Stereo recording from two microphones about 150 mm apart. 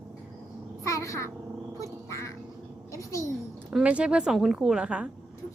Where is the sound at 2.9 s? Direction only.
20° left (ahead or behind).